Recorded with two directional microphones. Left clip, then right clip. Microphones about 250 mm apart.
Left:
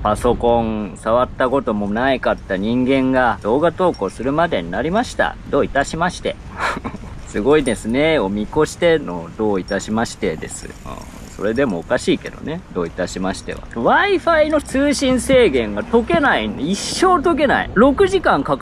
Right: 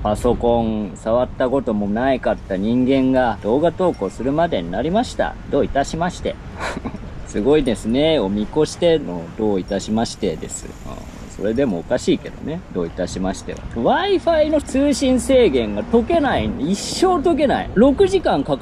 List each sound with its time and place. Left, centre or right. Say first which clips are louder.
0.2 s speech: left 2 dB; centre